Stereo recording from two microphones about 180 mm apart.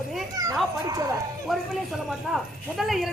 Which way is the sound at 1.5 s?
Centre (ahead or behind).